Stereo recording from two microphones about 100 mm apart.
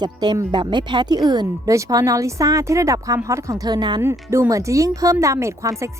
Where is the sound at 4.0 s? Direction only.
25° right (ahead or behind).